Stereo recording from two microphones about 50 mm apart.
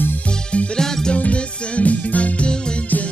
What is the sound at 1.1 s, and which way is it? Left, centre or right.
Music, left.